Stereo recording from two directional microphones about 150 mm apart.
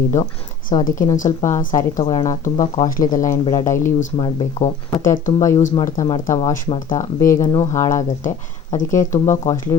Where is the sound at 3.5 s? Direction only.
25° left (ahead or behind).